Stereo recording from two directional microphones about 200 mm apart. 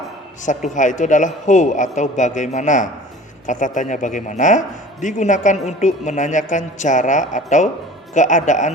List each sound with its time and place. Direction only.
0.4 s a man's voice: 40° left (ahead or behind)